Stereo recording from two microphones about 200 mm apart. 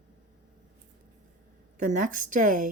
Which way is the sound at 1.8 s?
40° right (ahead or behind).